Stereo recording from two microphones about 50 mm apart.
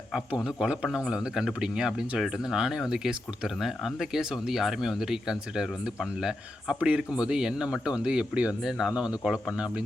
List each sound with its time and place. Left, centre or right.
0.4 s a man's voice: centre